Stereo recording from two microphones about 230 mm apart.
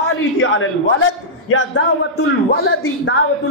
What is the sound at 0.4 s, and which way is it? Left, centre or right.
Speech, left.